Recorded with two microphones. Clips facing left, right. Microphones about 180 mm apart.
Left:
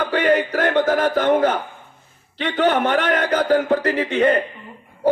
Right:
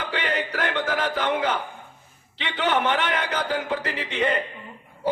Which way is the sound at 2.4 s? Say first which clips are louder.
Left 6 dB; 45° left (ahead or behind).